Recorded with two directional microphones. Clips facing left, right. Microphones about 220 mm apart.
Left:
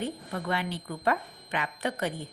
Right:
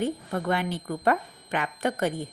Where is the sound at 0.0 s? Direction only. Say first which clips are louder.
Right 5 dB; 50° right (ahead or behind).